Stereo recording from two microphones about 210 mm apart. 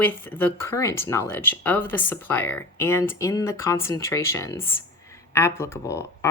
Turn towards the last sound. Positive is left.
turn(degrees=15)  # may be behind; listen again after turning